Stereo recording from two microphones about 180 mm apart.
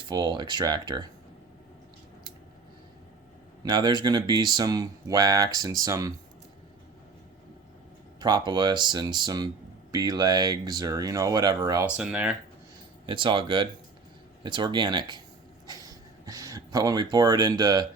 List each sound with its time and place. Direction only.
0.1 s speech: 25° right (ahead or behind)
3.6 s speech: 25° right (ahead or behind)
8.2 s speech: 25° right (ahead or behind); by 12.4 s 5° right (ahead or behind)
13.1 s speech: 30° right (ahead or behind)
15.6 s a sound: 20° right (ahead or behind)